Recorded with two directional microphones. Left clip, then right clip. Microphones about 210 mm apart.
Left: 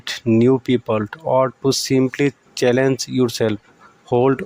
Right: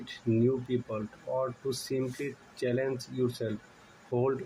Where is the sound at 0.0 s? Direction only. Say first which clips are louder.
Left 13 dB; 50° left (ahead or behind).